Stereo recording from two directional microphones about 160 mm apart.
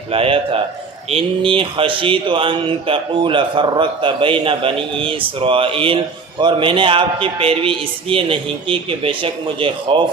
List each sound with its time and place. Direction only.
0.1 s speech: 35° right (ahead or behind)